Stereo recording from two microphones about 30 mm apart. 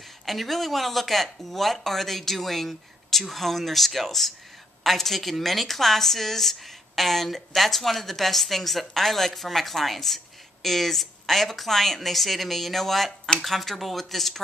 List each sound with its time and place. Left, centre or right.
0.2 s a woman's voice: centre